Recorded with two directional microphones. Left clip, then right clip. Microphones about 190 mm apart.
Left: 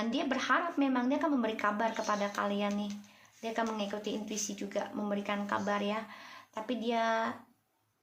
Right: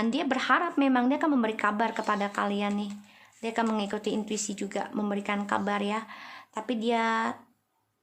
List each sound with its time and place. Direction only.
0.0 s speech: 35° right (ahead or behind)